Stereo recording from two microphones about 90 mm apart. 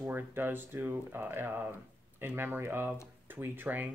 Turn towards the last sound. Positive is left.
turn(degrees=-20)  # may be behind; listen again after turning